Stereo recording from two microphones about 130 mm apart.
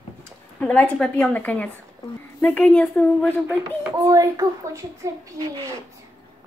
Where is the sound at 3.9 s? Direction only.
25° right (ahead or behind).